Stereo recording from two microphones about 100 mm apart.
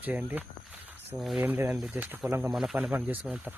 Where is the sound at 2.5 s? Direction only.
5° right (ahead or behind).